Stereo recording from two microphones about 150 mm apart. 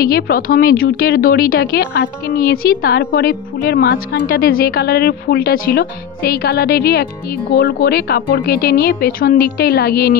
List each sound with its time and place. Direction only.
0.0 s a woman's voice: 75° left (ahead or behind)